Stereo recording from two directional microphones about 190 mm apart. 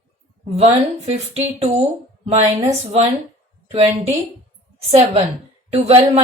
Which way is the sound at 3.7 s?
30° right (ahead or behind).